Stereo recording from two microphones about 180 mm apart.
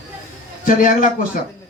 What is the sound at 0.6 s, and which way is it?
Speech, 45° left (ahead or behind).